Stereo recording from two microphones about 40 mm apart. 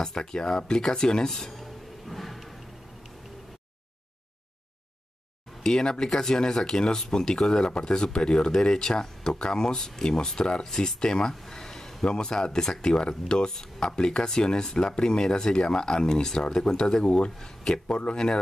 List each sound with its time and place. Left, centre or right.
0.0 s speech: centre
1.6 s music: centre
5.6 s speech: centre